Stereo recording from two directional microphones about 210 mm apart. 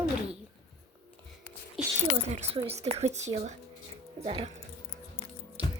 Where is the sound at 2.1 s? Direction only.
30° right (ahead or behind).